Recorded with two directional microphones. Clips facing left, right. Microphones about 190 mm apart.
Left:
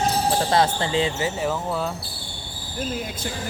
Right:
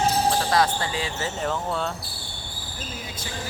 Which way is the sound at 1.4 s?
5° left (ahead or behind).